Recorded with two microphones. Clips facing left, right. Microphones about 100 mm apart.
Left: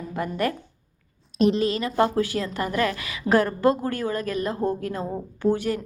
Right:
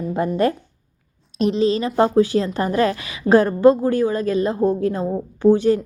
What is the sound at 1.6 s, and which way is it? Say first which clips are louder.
A woman's voice: right 5 dB; 25° right (ahead or behind).